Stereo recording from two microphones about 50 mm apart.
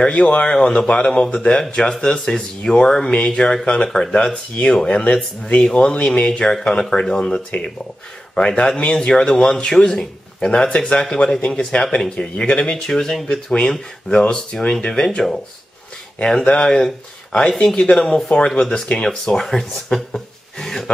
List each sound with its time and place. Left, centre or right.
0.0 s speech: centre